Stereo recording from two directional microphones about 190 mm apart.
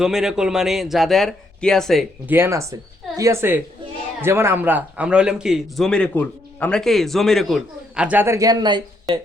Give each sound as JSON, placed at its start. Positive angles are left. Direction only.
{"t": 0.0, "sound": "a man's voice", "side_deg": -5}
{"t": 2.3, "sound": "a man's voice", "side_deg": -15}